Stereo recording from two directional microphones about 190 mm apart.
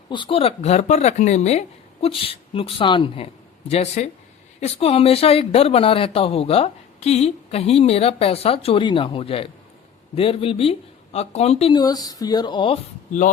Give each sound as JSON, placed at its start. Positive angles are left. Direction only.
{"t": 0.1, "sound": "speech", "side_deg": 25}
{"t": 11.7, "sound": "speech", "side_deg": 20}